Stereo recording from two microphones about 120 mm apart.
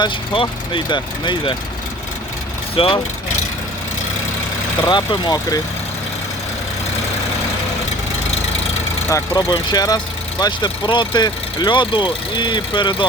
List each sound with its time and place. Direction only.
0.0 s speech: 40° left (ahead or behind)
2.7 s speech: 50° left (ahead or behind)
4.9 s speech: 35° left (ahead or behind)
9.0 s speech: 30° left (ahead or behind)